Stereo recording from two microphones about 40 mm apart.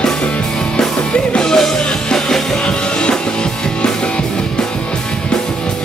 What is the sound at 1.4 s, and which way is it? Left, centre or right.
Music, centre.